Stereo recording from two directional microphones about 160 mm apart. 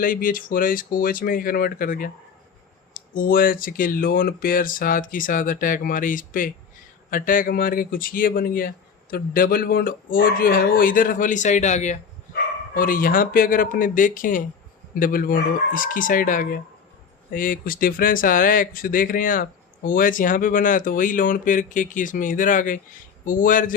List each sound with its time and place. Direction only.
0.0 s speech: 60° left (ahead or behind)
12.7 s speech: 60° left (ahead or behind)